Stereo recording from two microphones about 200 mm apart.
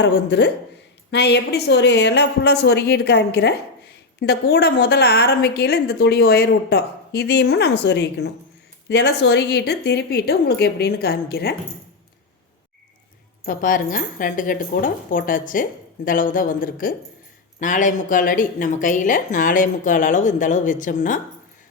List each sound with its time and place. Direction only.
0.0 s a woman's voice: 60° left (ahead or behind)
13.4 s a woman's voice: 45° left (ahead or behind)